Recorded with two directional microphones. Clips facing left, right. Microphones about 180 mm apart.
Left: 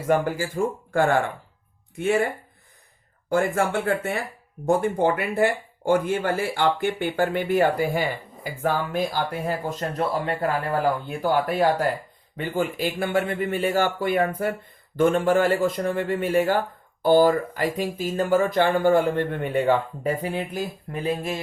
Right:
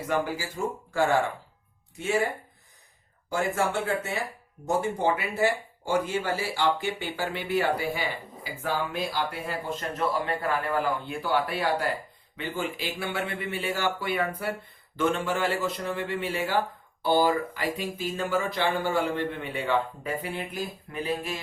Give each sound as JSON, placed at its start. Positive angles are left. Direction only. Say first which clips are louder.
{"t": 0.1, "sound": "speech", "louder": "left 7 dB", "side_deg": 50}
{"t": 3.2, "sound": "speech", "louder": "left 5 dB", "side_deg": 55}